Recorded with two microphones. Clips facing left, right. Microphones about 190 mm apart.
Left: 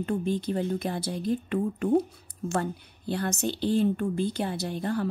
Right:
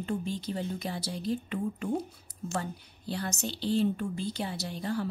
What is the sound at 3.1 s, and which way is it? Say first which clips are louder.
A woman's voice: left 6 dB; 55° left (ahead or behind).